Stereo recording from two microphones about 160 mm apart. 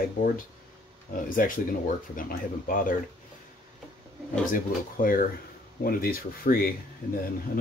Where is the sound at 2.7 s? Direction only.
60° left (ahead or behind).